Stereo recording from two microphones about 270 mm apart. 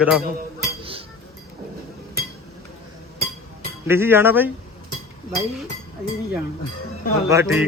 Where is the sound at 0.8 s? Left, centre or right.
Centre.